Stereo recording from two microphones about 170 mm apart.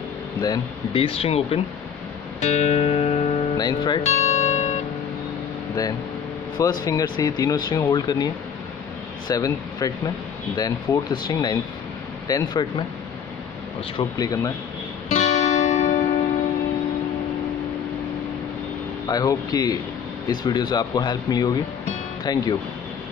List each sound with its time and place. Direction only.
0.4 s speech: 30° left (ahead or behind)
2.4 s music: 40° left (ahead or behind)
3.5 s speech: 25° left (ahead or behind)
4.0 s music: 40° left (ahead or behind)
6.8 s speech: 20° left (ahead or behind)
9.3 s speech: 20° left (ahead or behind)
13.9 s speech: 20° left (ahead or behind)
15.0 s music: 40° left (ahead or behind)
19.0 s speech: 20° left (ahead or behind)